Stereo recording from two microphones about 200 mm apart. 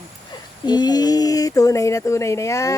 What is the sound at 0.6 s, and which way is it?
Speech, 20° left (ahead or behind).